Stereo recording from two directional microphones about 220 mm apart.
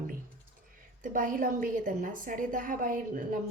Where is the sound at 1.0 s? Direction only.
40° right (ahead or behind).